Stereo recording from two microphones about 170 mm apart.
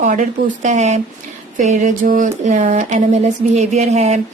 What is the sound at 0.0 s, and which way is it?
Speech, 50° right (ahead or behind).